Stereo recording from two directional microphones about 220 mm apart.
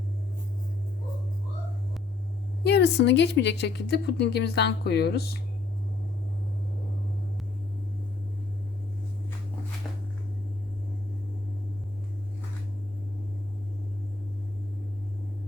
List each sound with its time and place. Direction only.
2.6 s a woman's voice: 50° left (ahead or behind)